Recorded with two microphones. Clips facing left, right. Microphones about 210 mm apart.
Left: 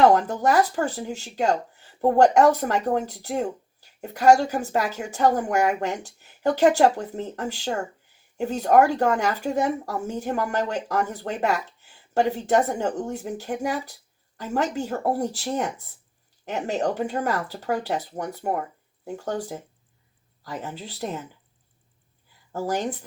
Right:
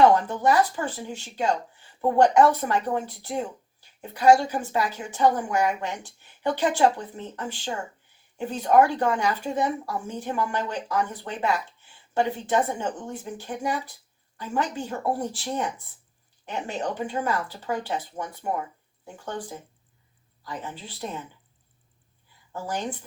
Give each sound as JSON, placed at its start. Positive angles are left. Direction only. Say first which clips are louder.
{"t": 0.3, "sound": "speech", "louder": "left 1 dB", "side_deg": 40}
{"t": 22.5, "sound": "speech", "louder": "left 5 dB", "side_deg": 40}